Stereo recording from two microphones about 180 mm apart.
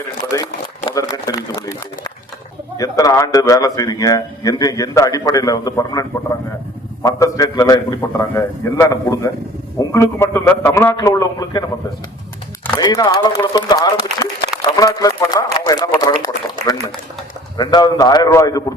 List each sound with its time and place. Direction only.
0.9 s speech: 20° left (ahead or behind)
2.7 s a man's voice: 20° left (ahead or behind)
12.7 s speech: 20° left (ahead or behind)